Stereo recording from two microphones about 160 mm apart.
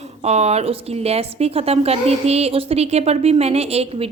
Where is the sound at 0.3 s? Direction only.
40° right (ahead or behind).